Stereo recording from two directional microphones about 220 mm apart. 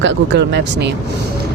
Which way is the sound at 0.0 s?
55° right (ahead or behind).